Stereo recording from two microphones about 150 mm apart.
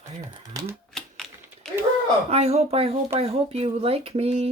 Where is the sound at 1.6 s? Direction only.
5° left (ahead or behind).